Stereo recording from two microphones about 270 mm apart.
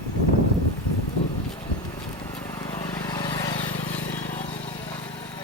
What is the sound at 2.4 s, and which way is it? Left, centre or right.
Vehicle, centre.